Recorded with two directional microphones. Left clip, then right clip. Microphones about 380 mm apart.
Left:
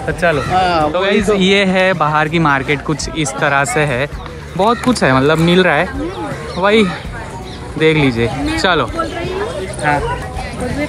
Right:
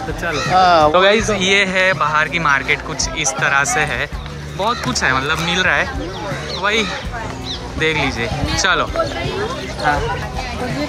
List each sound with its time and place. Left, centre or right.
0.2 s speech: centre
0.7 s speech: centre
1.1 s speech: centre